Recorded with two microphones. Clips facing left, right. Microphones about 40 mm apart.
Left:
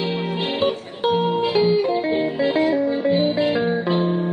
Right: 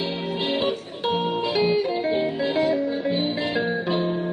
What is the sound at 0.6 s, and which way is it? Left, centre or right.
Music, left.